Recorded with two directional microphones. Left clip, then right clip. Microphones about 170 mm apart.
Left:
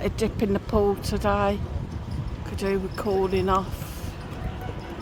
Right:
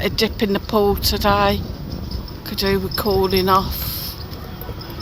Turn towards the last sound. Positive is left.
turn(degrees=-30)  # may be behind; listen again after turning